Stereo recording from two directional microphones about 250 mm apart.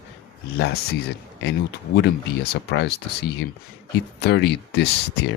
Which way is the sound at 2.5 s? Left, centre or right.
Left.